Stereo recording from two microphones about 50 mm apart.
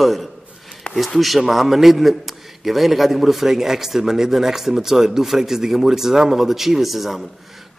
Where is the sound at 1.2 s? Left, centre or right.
Centre.